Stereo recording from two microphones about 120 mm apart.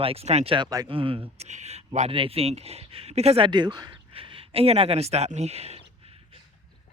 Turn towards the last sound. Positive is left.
turn(degrees=-60)  # may be behind; listen again after turning